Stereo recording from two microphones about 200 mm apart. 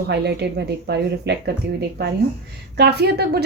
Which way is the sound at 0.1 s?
55° right (ahead or behind).